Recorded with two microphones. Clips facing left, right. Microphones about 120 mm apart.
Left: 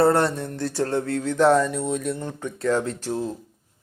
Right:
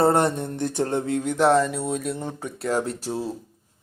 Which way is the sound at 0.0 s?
20° right (ahead or behind).